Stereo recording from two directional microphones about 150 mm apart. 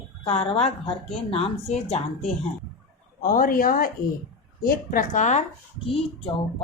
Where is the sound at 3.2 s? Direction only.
65° left (ahead or behind).